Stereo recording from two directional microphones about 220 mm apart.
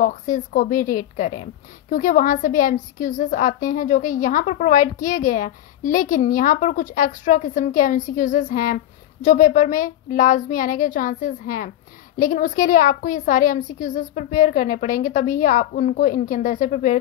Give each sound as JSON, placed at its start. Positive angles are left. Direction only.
{"t": 0.0, "sound": "a woman's voice", "side_deg": 40}